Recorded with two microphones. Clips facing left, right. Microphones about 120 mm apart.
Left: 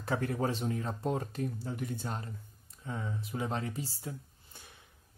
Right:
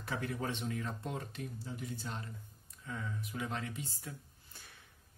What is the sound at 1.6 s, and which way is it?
Speech, 60° left (ahead or behind).